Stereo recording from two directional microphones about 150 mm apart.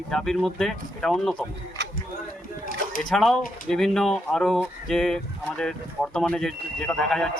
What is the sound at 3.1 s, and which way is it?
Speech, centre (ahead or behind).